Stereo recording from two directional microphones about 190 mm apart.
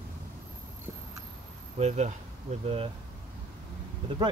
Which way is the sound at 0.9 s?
15° right (ahead or behind).